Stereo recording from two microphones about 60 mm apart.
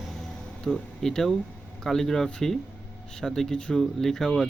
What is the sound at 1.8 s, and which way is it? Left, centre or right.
Speech, centre.